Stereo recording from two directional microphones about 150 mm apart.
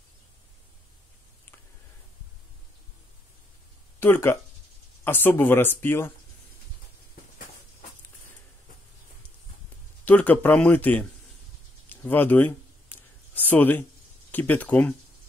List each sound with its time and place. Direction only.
4.0 s speech: 15° left (ahead or behind)
10.0 s speech: 10° left (ahead or behind)
11.9 s a sound: 10° left (ahead or behind)
14.3 s speech: 10° left (ahead or behind)